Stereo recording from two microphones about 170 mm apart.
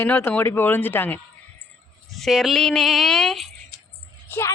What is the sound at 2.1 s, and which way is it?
A child's voice, centre (ahead or behind).